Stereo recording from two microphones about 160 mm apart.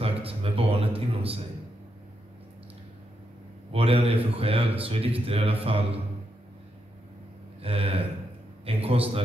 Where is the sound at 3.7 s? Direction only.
35° right (ahead or behind).